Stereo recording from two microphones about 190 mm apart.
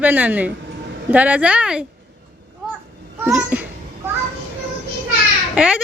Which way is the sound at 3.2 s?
10° right (ahead or behind).